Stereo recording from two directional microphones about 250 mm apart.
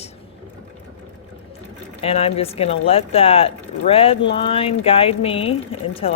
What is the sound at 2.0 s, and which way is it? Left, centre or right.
Speech, left.